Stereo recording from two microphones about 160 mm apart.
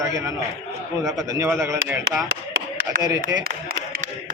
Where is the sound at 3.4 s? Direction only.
70° right (ahead or behind).